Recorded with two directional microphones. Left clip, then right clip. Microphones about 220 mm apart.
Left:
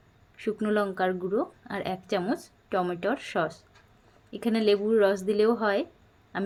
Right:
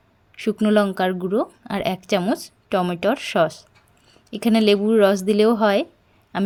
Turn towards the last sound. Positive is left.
turn(degrees=-50)  # may be behind; listen again after turning